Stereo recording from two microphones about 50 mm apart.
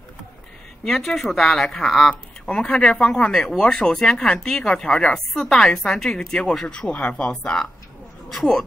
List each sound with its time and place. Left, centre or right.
0.8 s speech: centre
2.4 s speech: centre
6.7 s speech: left